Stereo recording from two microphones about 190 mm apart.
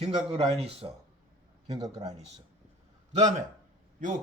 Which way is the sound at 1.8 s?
20° right (ahead or behind).